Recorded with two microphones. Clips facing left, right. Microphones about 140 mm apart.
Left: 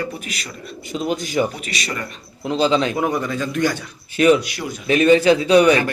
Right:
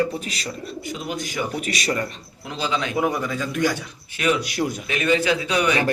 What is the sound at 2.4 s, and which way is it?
Speech, 30° left (ahead or behind).